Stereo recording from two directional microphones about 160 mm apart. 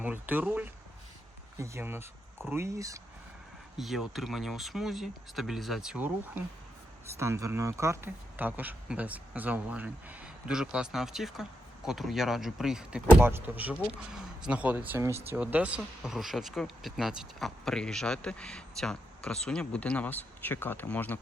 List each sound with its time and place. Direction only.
0.0 s speech: 10° right (ahead or behind)
3.8 s speech: centre (ahead or behind)